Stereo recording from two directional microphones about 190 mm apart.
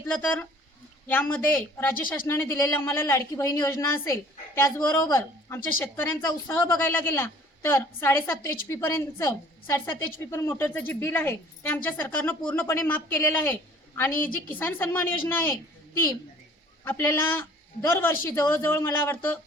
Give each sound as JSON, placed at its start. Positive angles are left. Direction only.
{"t": 0.1, "sound": "a man's voice", "side_deg": 5}
{"t": 16.8, "sound": "speech", "side_deg": 10}